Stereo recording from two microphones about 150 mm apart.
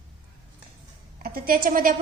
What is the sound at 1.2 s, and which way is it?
Speech, 75° right (ahead or behind).